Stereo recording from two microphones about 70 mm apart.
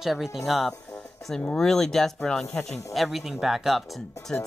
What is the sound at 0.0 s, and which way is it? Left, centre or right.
Speech, centre.